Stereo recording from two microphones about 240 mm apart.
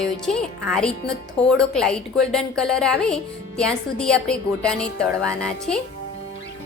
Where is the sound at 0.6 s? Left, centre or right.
Centre.